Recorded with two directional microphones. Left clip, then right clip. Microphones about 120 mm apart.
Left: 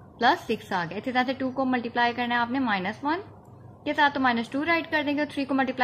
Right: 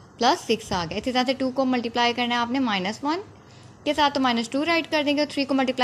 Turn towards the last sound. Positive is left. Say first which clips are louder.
# right 3 dB
turn(degrees=-25)  # may be behind; listen again after turning